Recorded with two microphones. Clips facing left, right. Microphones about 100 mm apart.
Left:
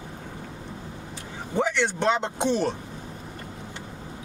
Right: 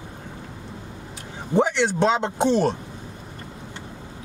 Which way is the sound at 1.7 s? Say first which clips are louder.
Right 3 dB; 15° right (ahead or behind).